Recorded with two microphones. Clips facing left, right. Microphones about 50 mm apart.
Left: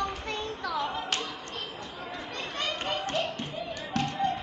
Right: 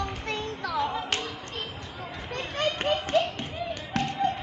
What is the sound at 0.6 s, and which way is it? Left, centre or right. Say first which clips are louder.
Music: right 3 dB; right.